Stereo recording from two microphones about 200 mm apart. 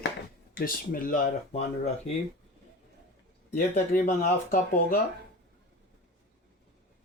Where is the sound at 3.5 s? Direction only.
45° left (ahead or behind).